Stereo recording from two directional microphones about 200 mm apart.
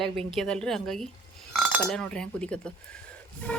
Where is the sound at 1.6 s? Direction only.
Centre (ahead or behind).